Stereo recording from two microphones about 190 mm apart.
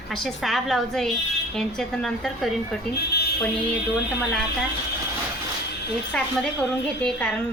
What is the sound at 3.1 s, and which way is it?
Buzzer, 55° left (ahead or behind).